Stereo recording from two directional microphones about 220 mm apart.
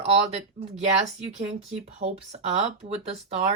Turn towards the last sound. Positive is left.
turn(degrees=-30)  # may be behind; listen again after turning